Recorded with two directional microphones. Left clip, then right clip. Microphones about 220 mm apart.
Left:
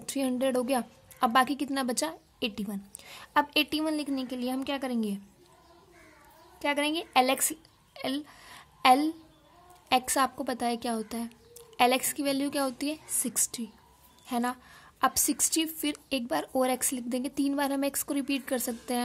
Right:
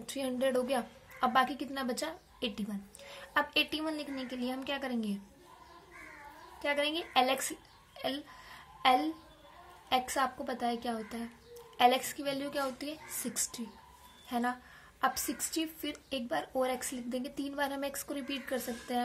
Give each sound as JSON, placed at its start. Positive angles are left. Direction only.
{"t": 0.1, "sound": "a woman's voice", "side_deg": 40}
{"t": 6.6, "sound": "a woman's voice", "side_deg": 45}